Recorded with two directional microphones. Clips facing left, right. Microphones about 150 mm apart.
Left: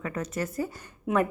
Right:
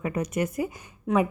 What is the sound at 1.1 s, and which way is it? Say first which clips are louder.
Speech: right 2 dB; 5° left (ahead or behind).